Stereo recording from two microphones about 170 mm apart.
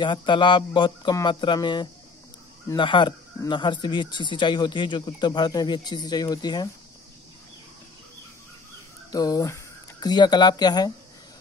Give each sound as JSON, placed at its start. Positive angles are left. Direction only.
{"t": 0.0, "sound": "speech", "side_deg": 30}
{"t": 9.1, "sound": "speech", "side_deg": 20}